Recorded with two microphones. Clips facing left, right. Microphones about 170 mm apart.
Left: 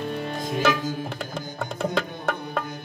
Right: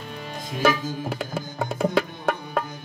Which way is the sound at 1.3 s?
10° right (ahead or behind).